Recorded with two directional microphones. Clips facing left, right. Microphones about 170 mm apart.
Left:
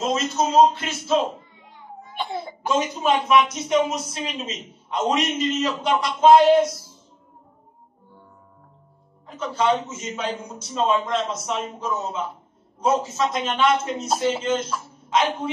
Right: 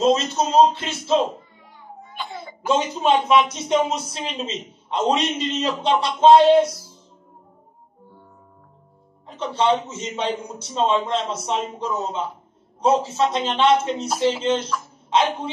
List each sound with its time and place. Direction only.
0.0 s a man's voice: 30° right (ahead or behind)
2.7 s a man's voice: 25° right (ahead or behind)
9.5 s a man's voice: 25° right (ahead or behind)